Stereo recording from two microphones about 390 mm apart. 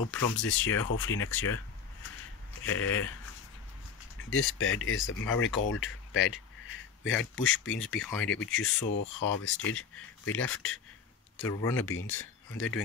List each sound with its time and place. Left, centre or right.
0.4 s speech: left
2.6 s speech: left
4.2 s speech: left
8.0 s speech: centre
8.3 s speech: left
11.4 s speech: centre
11.9 s speech: left